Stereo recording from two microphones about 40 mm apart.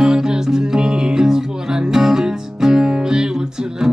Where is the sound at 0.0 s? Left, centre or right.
Centre.